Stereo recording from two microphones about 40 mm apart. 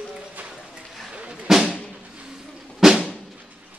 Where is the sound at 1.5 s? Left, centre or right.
Centre.